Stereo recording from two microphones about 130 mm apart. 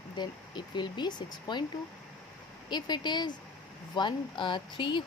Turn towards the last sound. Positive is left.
turn(degrees=40)  # may be behind; listen again after turning